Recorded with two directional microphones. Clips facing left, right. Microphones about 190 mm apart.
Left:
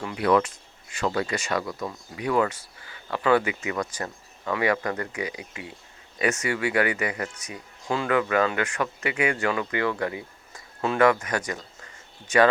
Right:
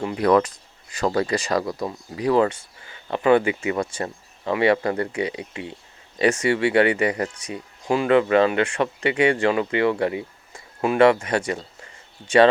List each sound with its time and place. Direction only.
0.2 s speech: 40° right (ahead or behind)